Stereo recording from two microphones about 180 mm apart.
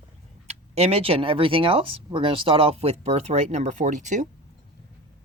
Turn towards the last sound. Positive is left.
turn(degrees=-45)  # may be behind; listen again after turning